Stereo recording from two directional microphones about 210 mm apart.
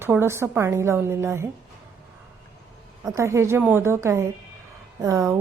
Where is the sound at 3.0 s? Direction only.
15° right (ahead or behind).